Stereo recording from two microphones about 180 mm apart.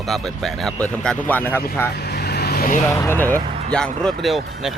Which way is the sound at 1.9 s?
65° left (ahead or behind).